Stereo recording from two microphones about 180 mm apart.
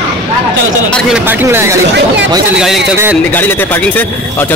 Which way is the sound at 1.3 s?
10° right (ahead or behind).